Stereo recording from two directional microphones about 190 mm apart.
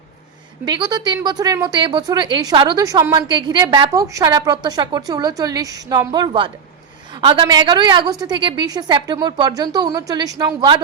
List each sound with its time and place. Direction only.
0.6 s speech: 20° right (ahead or behind)